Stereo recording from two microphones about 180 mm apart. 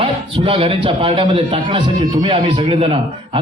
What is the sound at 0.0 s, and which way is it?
A man's voice, 30° right (ahead or behind).